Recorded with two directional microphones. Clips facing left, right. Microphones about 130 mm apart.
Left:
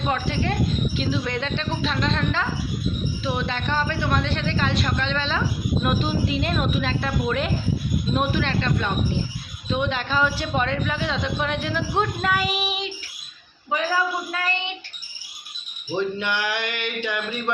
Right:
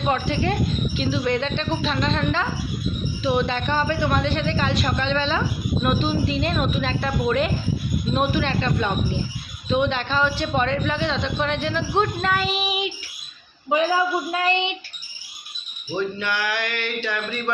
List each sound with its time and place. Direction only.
0.0 s speech: centre (ahead or behind)
5.8 s speech: 10° left (ahead or behind)
13.7 s a woman's voice: 20° right (ahead or behind)
16.0 s speech: 20° left (ahead or behind)